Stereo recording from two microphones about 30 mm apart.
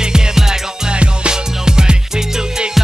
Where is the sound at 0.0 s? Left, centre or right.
Right.